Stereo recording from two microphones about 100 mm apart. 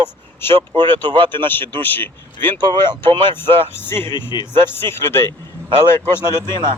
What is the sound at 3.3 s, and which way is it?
Speech, 20° left (ahead or behind).